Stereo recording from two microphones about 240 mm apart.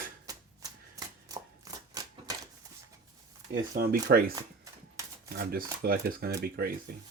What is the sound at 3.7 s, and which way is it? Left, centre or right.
Speech, right.